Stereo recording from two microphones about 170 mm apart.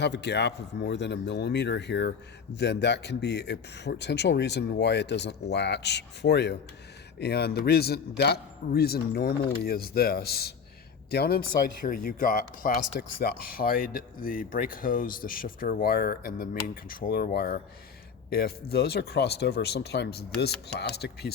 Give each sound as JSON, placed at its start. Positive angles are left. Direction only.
{"t": 0.0, "sound": "a man's voice", "side_deg": 85}
{"t": 11.9, "sound": "a man's voice", "side_deg": 55}